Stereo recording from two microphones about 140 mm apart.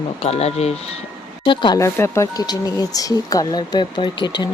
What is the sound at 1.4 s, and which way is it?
Speech, 35° left (ahead or behind).